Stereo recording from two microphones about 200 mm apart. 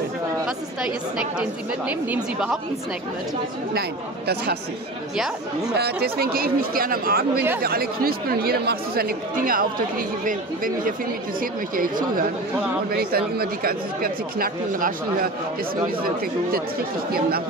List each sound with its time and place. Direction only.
1.1 s a woman's voice: 5° right (ahead or behind)
5.1 s a woman's voice: centre (ahead or behind)
5.8 s speech: 50° right (ahead or behind)